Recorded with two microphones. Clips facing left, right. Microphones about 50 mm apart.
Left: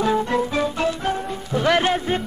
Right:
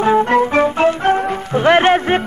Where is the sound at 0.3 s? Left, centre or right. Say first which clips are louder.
Right 8 dB; right.